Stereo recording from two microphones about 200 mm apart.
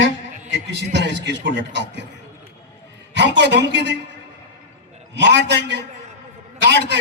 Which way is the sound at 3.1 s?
60° right (ahead or behind).